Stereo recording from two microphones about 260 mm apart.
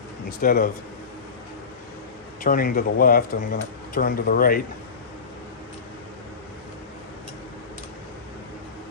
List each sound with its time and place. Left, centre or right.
0.3 s speech: left
2.4 s speech: left